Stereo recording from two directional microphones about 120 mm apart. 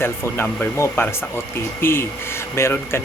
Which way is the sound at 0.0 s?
20° left (ahead or behind).